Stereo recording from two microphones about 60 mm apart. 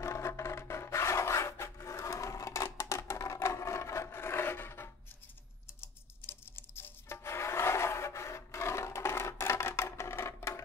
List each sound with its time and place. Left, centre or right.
0.0 s rub: left
5.8 s music: left